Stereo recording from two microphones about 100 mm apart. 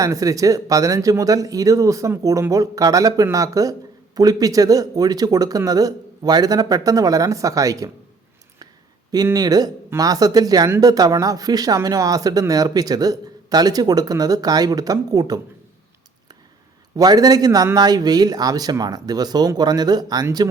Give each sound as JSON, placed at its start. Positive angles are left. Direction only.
{"t": 0.0, "sound": "speech", "side_deg": -35}
{"t": 9.1, "sound": "speech", "side_deg": -40}
{"t": 17.0, "sound": "speech", "side_deg": -40}